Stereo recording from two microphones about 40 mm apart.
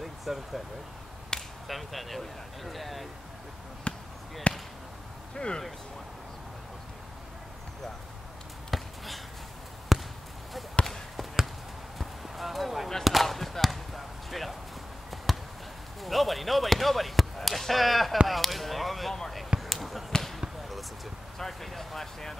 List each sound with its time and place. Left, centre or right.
0.0 s vehicle: centre
1.3 s whip: centre
1.7 s speech: centre
3.9 s basketball bounce: left
4.5 s speech: left
8.6 s basketball bounce: centre
12.0 s a sound: centre
13.0 s basketball bounce: centre
16.0 s speech: centre
18.2 s chop: centre
19.6 s basketball bounce: centre
20.1 s basketball bounce: centre
20.3 s basketball bounce: centre
21.4 s speech: centre